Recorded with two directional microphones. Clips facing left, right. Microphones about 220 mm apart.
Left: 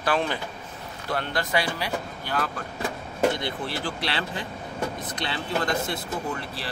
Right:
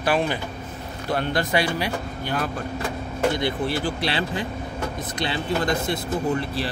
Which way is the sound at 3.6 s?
15° right (ahead or behind).